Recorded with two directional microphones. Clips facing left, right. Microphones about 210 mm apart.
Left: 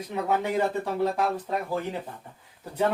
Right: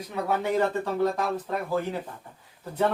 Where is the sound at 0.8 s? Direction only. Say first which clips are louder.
Even; 10° left (ahead or behind).